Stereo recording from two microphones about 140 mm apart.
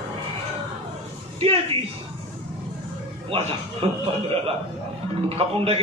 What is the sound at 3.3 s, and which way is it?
Speech, 45° right (ahead or behind).